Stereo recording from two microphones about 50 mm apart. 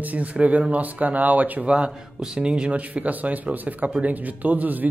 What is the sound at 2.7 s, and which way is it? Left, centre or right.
Speech, right.